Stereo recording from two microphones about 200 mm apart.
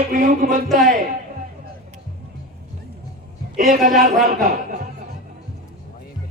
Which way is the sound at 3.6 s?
45° right (ahead or behind).